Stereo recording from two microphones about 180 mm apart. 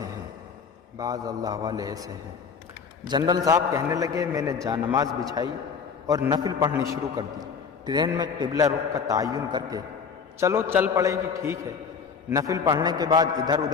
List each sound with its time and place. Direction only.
0.9 s a man's voice: 20° right (ahead or behind)